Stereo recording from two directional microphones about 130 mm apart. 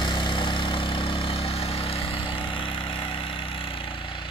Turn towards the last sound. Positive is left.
turn(degrees=40)  # may be behind; listen again after turning